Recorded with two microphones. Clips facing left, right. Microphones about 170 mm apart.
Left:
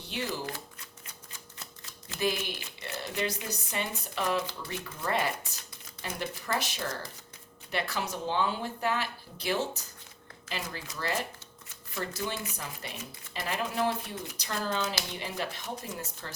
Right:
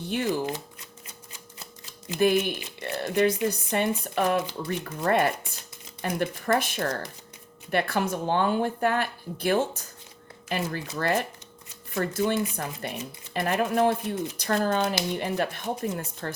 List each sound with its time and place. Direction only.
0.0 s shuffling cards: 50° right (ahead or behind)
2.1 s speech: 55° right (ahead or behind)